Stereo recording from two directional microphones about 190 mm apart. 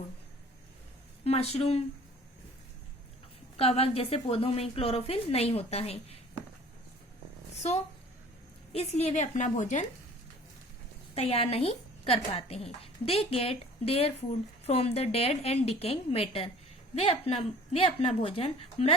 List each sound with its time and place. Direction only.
1.2 s a woman's voice: 30° left (ahead or behind)
3.6 s a woman's voice: 30° left (ahead or behind)
7.5 s a sound: 35° left (ahead or behind)
8.7 s a woman's voice: 35° left (ahead or behind)
11.1 s a woman's voice: 30° left (ahead or behind)